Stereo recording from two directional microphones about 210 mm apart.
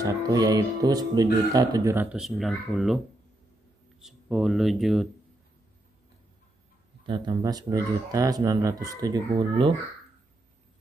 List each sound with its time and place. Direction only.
0.0 s speech: 15° right (ahead or behind)
2.1 s speech: centre (ahead or behind)
4.0 s speech: centre (ahead or behind)
7.1 s speech: 20° right (ahead or behind)